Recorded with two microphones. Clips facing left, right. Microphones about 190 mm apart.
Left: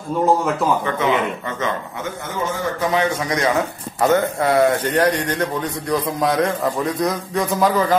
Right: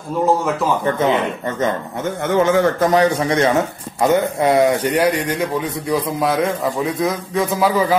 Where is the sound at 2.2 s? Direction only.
80° right.